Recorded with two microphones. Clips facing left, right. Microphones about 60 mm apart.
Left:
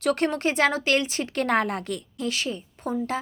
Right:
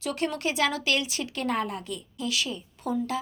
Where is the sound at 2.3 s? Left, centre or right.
Left.